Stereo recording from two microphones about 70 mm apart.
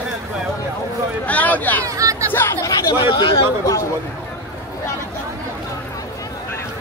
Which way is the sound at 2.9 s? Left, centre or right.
Left.